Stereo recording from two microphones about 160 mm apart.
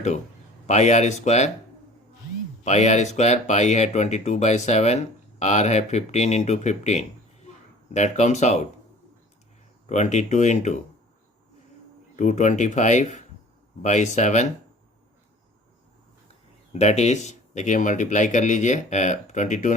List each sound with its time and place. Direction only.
0.7 s speech: 45° left (ahead or behind)
2.6 s speech: 45° left (ahead or behind)
9.9 s speech: 45° left (ahead or behind)
12.1 s speech: 45° left (ahead or behind)
16.7 s speech: 45° left (ahead or behind)